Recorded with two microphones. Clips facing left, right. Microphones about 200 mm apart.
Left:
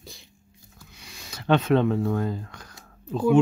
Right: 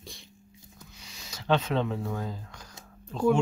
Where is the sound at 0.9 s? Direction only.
55° left (ahead or behind).